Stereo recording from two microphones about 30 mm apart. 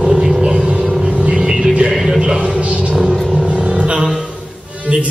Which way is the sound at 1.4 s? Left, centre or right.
Right.